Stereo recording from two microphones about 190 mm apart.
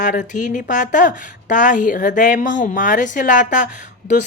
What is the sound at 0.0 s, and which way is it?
Speech, 45° left (ahead or behind).